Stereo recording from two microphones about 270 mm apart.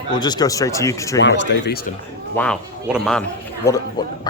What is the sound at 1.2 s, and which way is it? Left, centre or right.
Speech, left.